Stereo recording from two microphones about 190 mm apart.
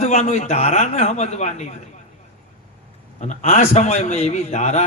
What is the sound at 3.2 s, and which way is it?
A man's voice, 40° left (ahead or behind).